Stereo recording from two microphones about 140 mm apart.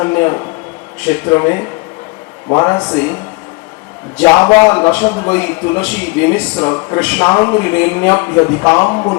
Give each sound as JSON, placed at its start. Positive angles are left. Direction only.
{"t": 0.0, "sound": "a man's voice", "side_deg": 15}
{"t": 2.9, "sound": "a man's voice", "side_deg": 15}
{"t": 4.4, "sound": "speech", "side_deg": 30}
{"t": 4.7, "sound": "a man's voice", "side_deg": 15}